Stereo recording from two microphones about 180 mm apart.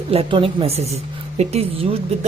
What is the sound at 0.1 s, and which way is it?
A woman's voice, 30° right (ahead or behind).